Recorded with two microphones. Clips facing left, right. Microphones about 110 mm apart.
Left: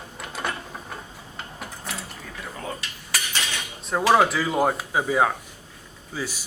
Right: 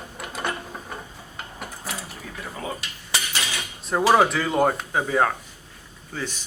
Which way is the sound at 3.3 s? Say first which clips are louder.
Even; 5° right (ahead or behind).